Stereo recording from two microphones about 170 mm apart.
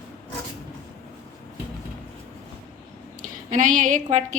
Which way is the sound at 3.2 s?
50° right (ahead or behind).